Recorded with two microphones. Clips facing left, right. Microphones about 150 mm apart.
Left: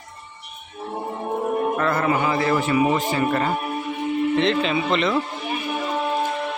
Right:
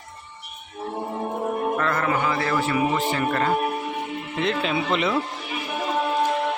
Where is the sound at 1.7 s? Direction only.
10° left (ahead or behind).